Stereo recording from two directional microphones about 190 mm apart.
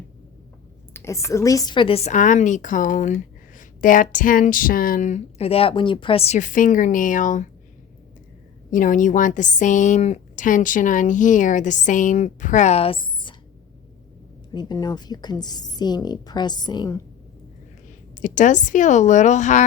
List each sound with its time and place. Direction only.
0.9 s a woman's voice: 15° left (ahead or behind); by 7.4 s 45° left (ahead or behind)
8.7 s a woman's voice: 45° left (ahead or behind); by 13.3 s 25° left (ahead or behind)
14.5 s a woman's voice: 20° left (ahead or behind)
18.2 s a woman's voice: 40° left (ahead or behind)